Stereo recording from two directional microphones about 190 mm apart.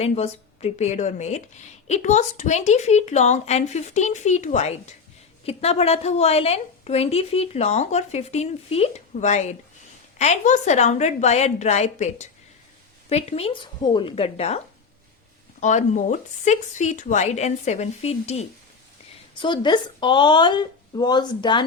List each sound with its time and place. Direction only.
0.0 s a woman's voice: 35° left (ahead or behind)
15.6 s a woman's voice: 40° left (ahead or behind); by 21.6 s 25° left (ahead or behind)